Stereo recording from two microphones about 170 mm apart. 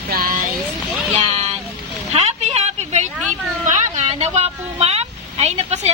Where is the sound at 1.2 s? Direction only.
40° right (ahead or behind).